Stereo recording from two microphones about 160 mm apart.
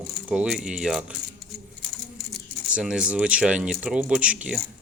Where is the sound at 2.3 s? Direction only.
5° right (ahead or behind).